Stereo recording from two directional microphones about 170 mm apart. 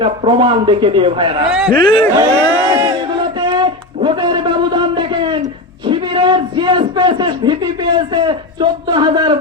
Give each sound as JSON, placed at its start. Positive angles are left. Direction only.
{"t": 0.0, "sound": "speech", "side_deg": -30}
{"t": 1.5, "sound": "speech", "side_deg": -5}
{"t": 1.8, "sound": "speech", "side_deg": 30}
{"t": 3.4, "sound": "a sound", "side_deg": -25}
{"t": 7.9, "sound": "speech", "side_deg": -25}